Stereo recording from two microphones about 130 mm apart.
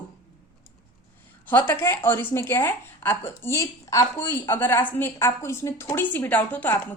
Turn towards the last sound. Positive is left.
turn(degrees=15)  # may be behind; listen again after turning